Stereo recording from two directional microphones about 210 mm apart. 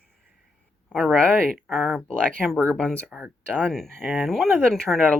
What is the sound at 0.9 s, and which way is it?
Speech, centre (ahead or behind).